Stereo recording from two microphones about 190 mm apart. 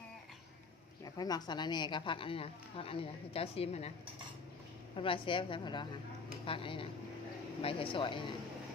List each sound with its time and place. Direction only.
1.0 s speech: 20° left (ahead or behind)
4.9 s speech: 30° left (ahead or behind)